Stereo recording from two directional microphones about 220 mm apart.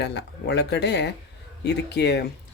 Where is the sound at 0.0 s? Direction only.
50° left (ahead or behind).